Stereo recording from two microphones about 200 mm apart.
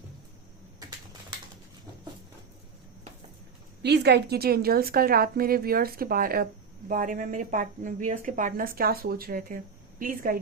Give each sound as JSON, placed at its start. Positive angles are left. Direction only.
{"t": 3.8, "sound": "a woman's voice", "side_deg": -55}